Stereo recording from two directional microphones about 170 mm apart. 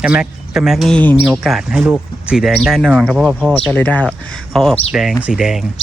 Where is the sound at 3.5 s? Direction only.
5° left (ahead or behind).